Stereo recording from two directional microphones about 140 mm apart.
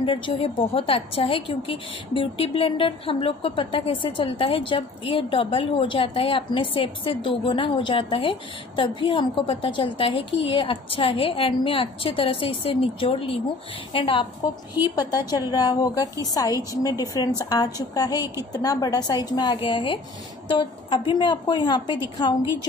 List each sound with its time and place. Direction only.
0.0 s a woman's voice: 40° left (ahead or behind)